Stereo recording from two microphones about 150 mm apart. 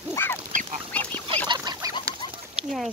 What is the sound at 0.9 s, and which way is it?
Duck, 10° left (ahead or behind).